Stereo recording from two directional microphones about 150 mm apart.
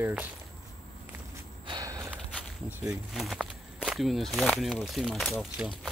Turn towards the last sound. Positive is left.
turn(degrees=0)  # may be behind; listen again after turning